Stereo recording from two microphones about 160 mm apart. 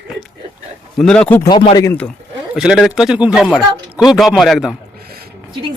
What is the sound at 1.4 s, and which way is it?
Speech, 30° left (ahead or behind).